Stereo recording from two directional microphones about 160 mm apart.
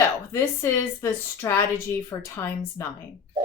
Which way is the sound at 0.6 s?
15° left (ahead or behind).